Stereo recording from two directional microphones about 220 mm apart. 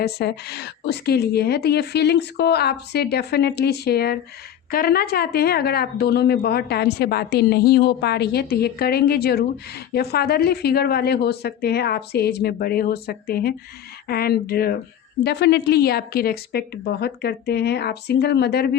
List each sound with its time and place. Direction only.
0.0 s speech: 45° left (ahead or behind)